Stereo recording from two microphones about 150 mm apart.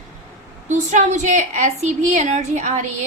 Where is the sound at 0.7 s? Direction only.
55° right (ahead or behind).